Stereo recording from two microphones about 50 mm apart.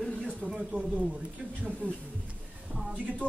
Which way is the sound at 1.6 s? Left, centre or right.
Right.